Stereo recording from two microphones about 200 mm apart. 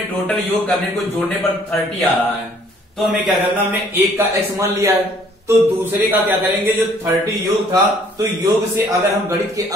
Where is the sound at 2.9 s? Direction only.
Centre (ahead or behind).